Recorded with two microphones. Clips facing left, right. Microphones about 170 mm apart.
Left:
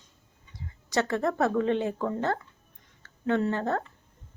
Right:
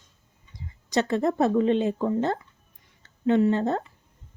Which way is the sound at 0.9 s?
20° right (ahead or behind).